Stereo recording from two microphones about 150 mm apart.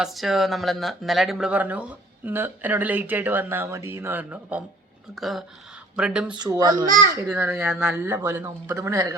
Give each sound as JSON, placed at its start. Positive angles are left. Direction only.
{"t": 0.0, "sound": "speech", "side_deg": 0}
{"t": 6.3, "sound": "speech", "side_deg": -25}
{"t": 7.3, "sound": "speech", "side_deg": -10}